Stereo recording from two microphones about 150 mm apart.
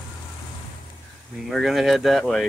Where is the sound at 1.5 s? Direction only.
Centre (ahead or behind).